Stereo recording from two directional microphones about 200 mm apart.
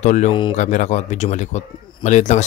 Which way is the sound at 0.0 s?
35° left (ahead or behind).